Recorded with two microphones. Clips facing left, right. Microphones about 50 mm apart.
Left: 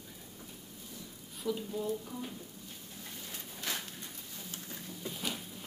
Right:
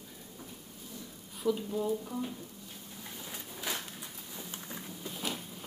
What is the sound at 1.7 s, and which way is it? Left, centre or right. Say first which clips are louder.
Speech: right 3 dB; centre.